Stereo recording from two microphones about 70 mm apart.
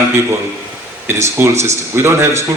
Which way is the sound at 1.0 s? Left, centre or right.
Right.